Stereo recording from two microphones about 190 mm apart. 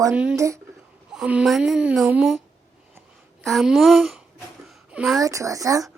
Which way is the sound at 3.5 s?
Centre (ahead or behind).